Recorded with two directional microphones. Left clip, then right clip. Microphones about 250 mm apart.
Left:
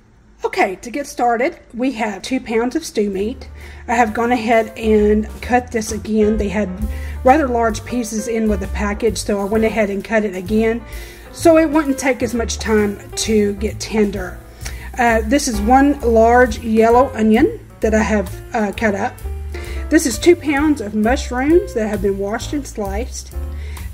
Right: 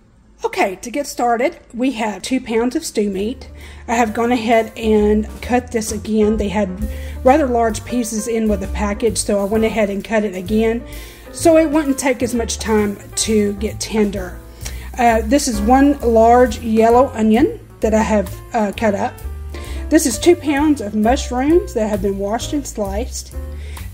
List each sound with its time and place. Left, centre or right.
0.4 s a woman's voice: centre